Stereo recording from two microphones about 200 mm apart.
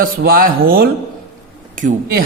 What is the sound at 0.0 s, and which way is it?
A man's voice, 45° right (ahead or behind).